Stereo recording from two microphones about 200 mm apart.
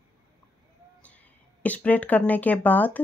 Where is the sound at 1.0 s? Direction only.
5° left (ahead or behind).